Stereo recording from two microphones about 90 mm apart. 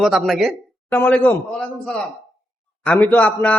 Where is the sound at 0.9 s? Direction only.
20° left (ahead or behind).